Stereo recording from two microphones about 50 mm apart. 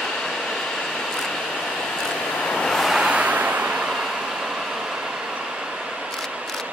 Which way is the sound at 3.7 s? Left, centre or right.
Centre.